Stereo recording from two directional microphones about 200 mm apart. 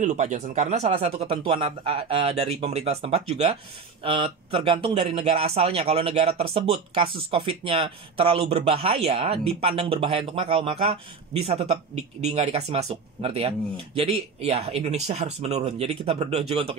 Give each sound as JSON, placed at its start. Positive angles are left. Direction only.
{"t": 0.0, "sound": "speech", "side_deg": -35}